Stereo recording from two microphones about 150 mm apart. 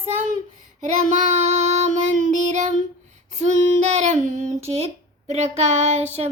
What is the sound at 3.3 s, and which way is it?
Female singing, 50° right (ahead or behind).